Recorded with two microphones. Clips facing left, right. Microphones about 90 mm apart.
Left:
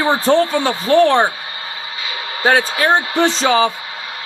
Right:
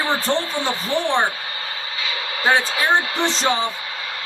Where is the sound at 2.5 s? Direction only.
65° left (ahead or behind).